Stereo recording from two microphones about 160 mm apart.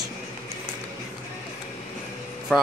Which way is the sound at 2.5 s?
5° right (ahead or behind).